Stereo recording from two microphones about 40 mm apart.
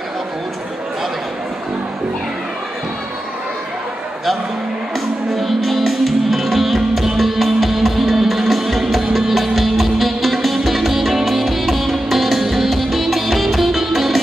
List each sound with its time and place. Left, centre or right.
5.3 s music: centre